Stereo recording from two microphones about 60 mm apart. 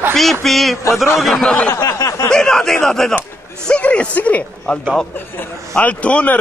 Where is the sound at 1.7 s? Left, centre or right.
Left.